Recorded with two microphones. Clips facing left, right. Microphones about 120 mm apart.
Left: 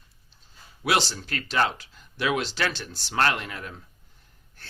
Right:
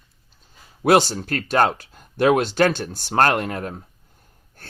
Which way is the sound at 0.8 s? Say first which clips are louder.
Right 9 dB; 50° right (ahead or behind).